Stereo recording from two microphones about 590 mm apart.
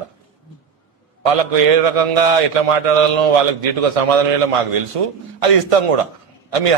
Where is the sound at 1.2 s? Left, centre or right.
Right.